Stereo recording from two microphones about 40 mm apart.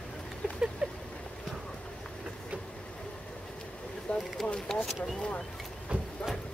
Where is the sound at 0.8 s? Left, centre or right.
Right.